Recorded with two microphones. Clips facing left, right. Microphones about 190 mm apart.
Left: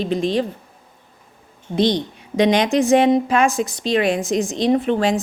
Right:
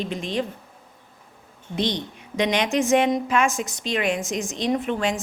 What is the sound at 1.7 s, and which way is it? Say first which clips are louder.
A woman's voice: left 7 dB; 35° left (ahead or behind).